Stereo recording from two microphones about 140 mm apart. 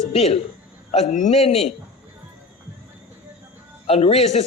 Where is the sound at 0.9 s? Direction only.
55° left (ahead or behind).